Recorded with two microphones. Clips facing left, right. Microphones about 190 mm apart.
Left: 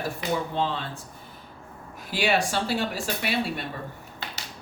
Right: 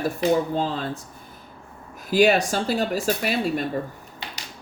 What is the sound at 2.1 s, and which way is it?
Speech, 40° right (ahead or behind).